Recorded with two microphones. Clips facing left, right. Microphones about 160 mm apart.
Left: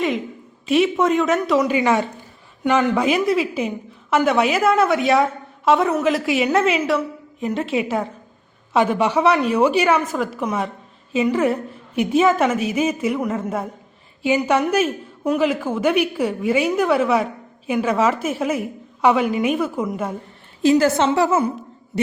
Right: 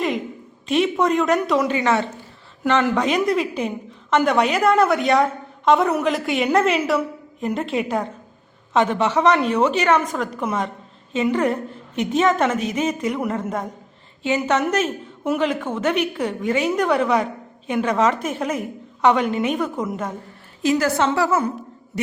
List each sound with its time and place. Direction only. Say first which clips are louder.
0.7 s a woman's voice: left 2 dB; centre (ahead or behind)
1.7 s a woman's voice: left 2 dB; 10° left (ahead or behind)
20.6 s a woman's voice: left 4 dB; 30° left (ahead or behind)